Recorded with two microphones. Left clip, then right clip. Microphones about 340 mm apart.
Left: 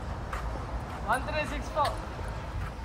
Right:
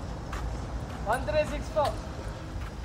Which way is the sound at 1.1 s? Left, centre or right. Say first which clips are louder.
Right 3 dB; right.